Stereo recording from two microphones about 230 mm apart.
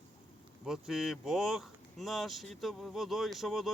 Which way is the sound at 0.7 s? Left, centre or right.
Centre.